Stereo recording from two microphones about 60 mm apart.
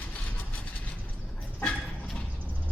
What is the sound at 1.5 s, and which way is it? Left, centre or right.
Dog, left.